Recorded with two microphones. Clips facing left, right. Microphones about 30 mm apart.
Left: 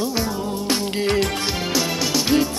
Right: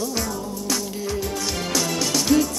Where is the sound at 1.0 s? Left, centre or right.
Left.